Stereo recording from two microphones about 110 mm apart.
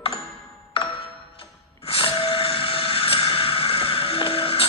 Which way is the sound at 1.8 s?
55° left (ahead or behind).